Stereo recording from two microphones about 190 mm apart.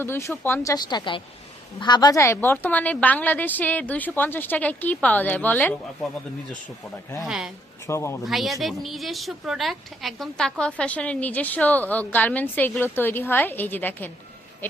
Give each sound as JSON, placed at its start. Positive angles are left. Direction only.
{"t": 0.0, "sound": "a woman's voice", "side_deg": 15}
{"t": 7.2, "sound": "speech", "side_deg": -5}
{"t": 7.9, "sound": "a woman's voice", "side_deg": 15}
{"t": 8.2, "sound": "a woman's voice", "side_deg": 0}